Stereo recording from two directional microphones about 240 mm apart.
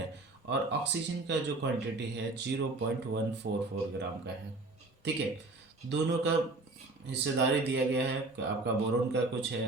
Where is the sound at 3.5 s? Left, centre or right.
Right.